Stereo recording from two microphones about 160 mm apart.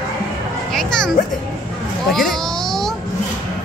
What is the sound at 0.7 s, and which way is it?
Speech, 5° left (ahead or behind).